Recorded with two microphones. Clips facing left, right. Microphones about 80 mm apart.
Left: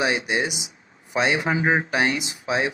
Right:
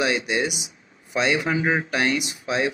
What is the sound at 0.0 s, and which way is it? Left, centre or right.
Speech, left.